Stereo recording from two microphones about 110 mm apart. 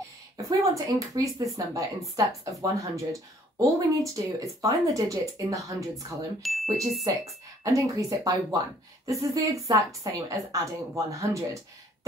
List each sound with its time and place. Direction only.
0.4 s speech: 30° right (ahead or behind)
6.4 s speech: centre (ahead or behind)
7.6 s speech: 30° right (ahead or behind)